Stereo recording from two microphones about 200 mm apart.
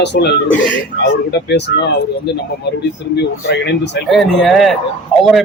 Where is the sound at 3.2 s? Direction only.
55° left (ahead or behind).